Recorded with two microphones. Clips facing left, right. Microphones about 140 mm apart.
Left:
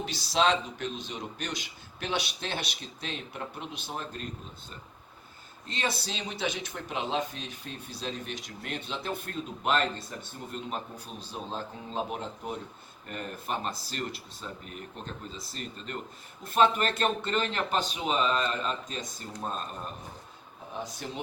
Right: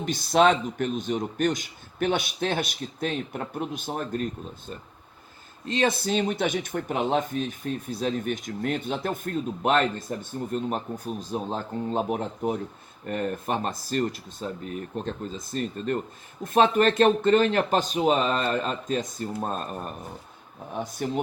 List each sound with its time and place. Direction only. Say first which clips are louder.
0.0 s speech: right 6 dB; 50° right (ahead or behind)
5.7 s speech: right 10 dB; 45° right (ahead or behind)